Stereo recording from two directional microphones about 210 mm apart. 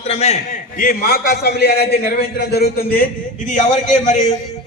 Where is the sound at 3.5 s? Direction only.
35° left (ahead or behind).